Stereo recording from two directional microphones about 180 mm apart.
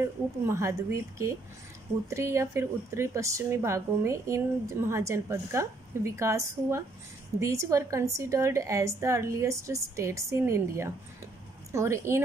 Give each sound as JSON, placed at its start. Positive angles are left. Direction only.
{"t": 0.0, "sound": "speech", "side_deg": -15}